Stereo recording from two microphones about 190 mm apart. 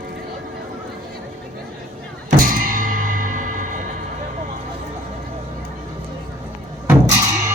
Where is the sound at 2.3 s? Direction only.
50° right (ahead or behind).